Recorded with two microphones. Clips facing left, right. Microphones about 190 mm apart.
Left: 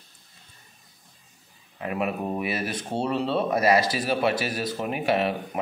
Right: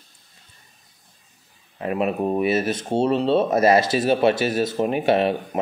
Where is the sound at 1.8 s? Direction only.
30° right (ahead or behind).